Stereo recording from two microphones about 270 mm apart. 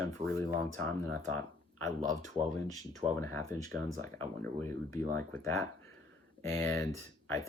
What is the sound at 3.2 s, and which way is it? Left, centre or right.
Speech, centre.